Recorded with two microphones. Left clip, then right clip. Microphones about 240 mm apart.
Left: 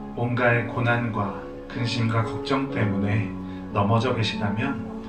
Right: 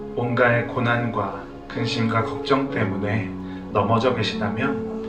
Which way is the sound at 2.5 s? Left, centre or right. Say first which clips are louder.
Right 5 dB; centre.